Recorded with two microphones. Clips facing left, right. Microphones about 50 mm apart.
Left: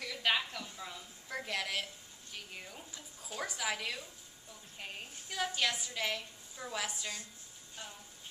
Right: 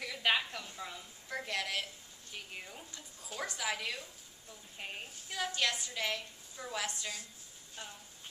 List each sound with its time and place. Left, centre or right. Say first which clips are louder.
0.0 s a sound: right 1 dB; centre
2.3 s a woman's voice: right 1 dB; centre
5.4 s a woman's voice: even; centre
7.8 s speech: right 1 dB; centre